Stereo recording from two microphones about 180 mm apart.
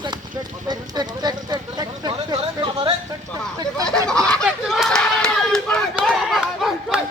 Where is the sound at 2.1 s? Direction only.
30° right (ahead or behind).